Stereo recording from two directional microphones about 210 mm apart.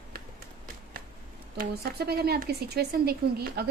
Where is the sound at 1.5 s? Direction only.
50° right (ahead or behind).